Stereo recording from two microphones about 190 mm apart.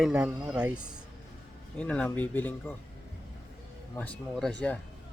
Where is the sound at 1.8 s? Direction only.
5° left (ahead or behind).